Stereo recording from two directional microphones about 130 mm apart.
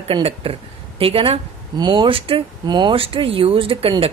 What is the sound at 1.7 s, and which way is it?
A woman's voice, 35° right (ahead or behind).